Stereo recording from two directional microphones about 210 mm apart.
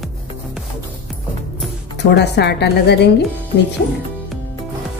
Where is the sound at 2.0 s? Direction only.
55° left (ahead or behind).